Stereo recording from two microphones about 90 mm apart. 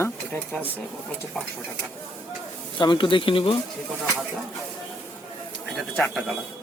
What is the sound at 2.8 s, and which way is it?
Speech, 60° left (ahead or behind).